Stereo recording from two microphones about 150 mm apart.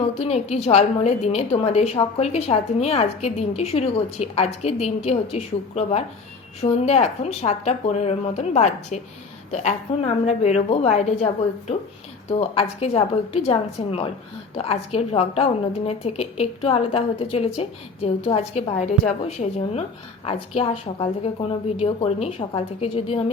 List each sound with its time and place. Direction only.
0.2 s a woman's voice: 45° left (ahead or behind)
12.3 s a woman's voice: 40° left (ahead or behind)